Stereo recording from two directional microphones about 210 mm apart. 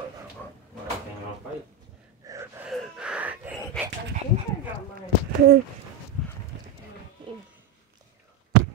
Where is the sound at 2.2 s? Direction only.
15° right (ahead or behind).